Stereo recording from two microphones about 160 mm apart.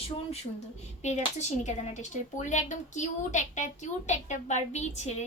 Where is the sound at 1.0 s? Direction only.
45° left (ahead or behind).